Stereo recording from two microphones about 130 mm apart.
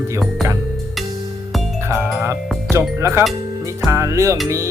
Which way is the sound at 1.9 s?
20° right (ahead or behind).